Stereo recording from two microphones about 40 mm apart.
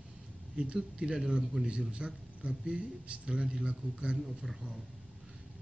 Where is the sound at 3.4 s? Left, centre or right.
Centre.